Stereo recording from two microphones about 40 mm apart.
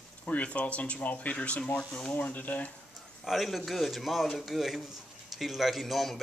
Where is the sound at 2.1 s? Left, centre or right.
Left.